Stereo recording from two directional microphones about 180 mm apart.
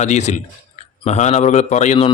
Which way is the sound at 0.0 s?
40° left (ahead or behind).